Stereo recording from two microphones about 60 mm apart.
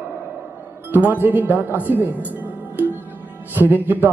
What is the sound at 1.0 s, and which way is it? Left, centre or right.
A man's voice, right.